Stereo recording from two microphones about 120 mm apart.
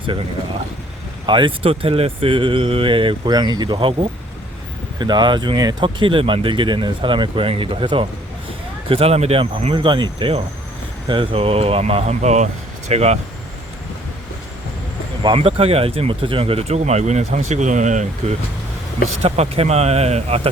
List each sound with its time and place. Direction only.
1.3 s speech: 45° right (ahead or behind)
4.9 s speech: 40° right (ahead or behind)
8.9 s speech: 55° right (ahead or behind)
15.4 s speech: 55° right (ahead or behind); by 18.3 s 90° right
19.2 s speech: 60° right (ahead or behind)